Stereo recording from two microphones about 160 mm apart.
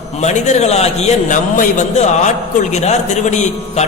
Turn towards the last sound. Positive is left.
turn(degrees=45)  # may be behind; listen again after turning